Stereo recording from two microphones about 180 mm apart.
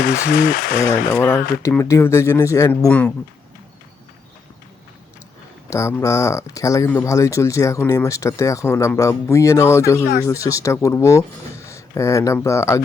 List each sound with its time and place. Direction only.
0.0 s speech: 55° left (ahead or behind)
0.8 s speech: 15° left (ahead or behind)
5.7 s speech: 15° left (ahead or behind)